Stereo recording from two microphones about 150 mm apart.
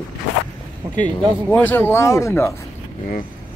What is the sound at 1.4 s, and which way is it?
Speech, 10° left (ahead or behind).